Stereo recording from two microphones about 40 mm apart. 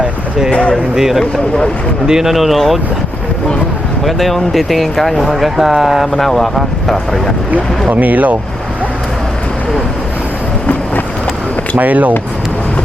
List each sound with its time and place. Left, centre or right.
0.9 s speech: centre
1.2 s speech: left
2.0 s speech: centre
2.3 s speech: centre
4.0 s speech: centre
6.1 s speech: centre
7.9 s speech: right
11.8 s speech: right